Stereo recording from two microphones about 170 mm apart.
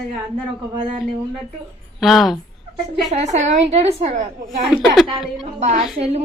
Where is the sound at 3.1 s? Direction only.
40° right (ahead or behind).